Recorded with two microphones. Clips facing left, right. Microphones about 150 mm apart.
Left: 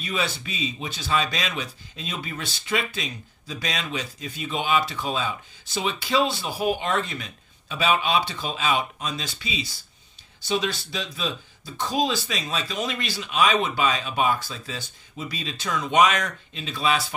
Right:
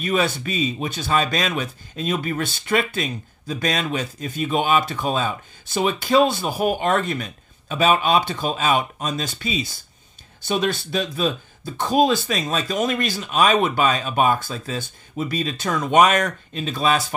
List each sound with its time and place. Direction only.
0.0 s speech: 50° right (ahead or behind)